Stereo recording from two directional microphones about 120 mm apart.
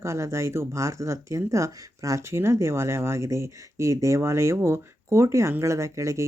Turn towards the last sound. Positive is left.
turn(degrees=-25)  # may be behind; listen again after turning